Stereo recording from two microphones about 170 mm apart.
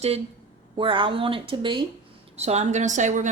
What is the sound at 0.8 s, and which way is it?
A woman's voice, 30° right (ahead or behind).